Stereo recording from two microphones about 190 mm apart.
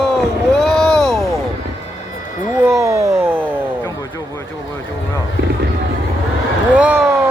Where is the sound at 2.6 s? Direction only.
15° right (ahead or behind).